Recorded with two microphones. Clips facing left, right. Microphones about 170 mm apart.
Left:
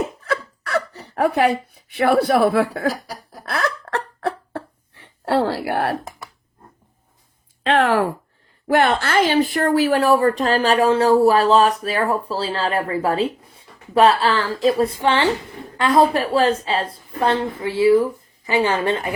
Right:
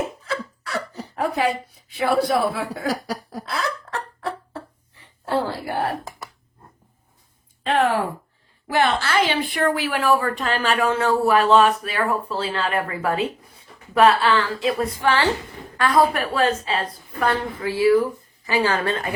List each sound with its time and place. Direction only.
0.3 s speech: 65° left (ahead or behind)
3.4 s a sound: 65° left (ahead or behind)
7.6 s speech: 90° left
8.6 s speech: 50° left (ahead or behind); by 19.1 s 20° left (ahead or behind)